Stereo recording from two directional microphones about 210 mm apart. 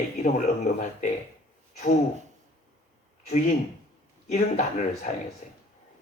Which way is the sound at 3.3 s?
35° left (ahead or behind).